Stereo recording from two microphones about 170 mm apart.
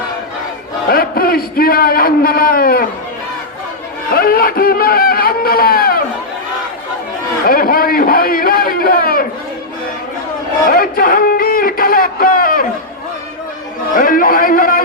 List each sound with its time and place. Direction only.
0.9 s a man's voice: 60° left (ahead or behind)
4.1 s speech: 60° left (ahead or behind)
7.4 s a man's voice: 60° left (ahead or behind)
10.7 s a sound: 55° left (ahead or behind)
13.9 s a man's voice: 55° left (ahead or behind)